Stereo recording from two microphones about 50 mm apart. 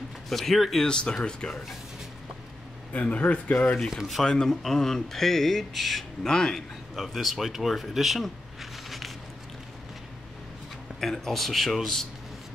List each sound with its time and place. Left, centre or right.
0.3 s speech: centre
0.8 s speech: centre
2.9 s speech: left
3.9 s speech: centre
4.2 s speech: centre
6.2 s speech: centre
7.0 s speech: centre
11.0 s speech: centre